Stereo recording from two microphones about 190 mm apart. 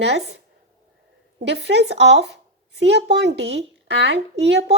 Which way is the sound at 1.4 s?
65° right (ahead or behind).